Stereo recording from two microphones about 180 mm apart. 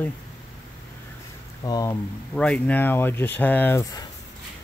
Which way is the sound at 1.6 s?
20° left (ahead or behind).